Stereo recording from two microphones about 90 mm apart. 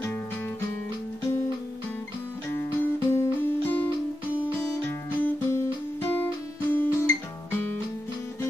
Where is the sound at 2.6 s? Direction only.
30° left (ahead or behind).